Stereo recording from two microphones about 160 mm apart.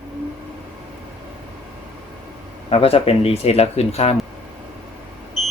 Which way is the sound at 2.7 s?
35° left (ahead or behind).